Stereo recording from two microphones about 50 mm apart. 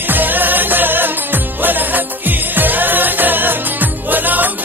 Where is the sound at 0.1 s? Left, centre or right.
Right.